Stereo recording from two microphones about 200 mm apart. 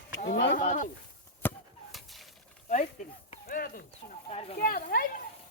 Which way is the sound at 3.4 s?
45° left (ahead or behind).